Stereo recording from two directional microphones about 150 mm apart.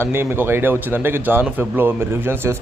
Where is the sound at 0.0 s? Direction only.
15° right (ahead or behind).